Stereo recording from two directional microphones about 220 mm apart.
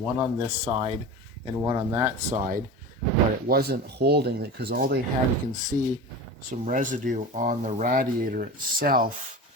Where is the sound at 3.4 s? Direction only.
45° right (ahead or behind).